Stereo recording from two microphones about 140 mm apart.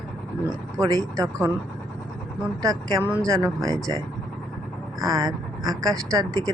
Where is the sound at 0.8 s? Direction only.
25° right (ahead or behind).